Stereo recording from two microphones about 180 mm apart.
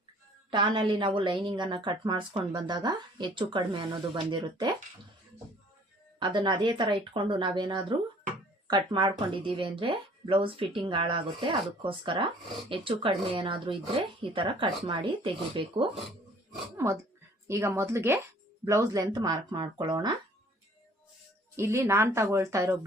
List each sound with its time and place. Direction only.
0.5 s a woman's voice: 25° right (ahead or behind)
6.1 s a woman's voice: 25° right (ahead or behind)
16.7 s a woman's voice: 15° right (ahead or behind)
21.5 s a woman's voice: 15° right (ahead or behind)